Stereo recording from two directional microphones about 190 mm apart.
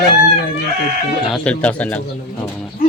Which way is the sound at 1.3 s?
5° left (ahead or behind).